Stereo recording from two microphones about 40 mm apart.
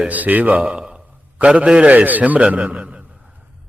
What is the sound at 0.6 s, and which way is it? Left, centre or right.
A man's voice, right.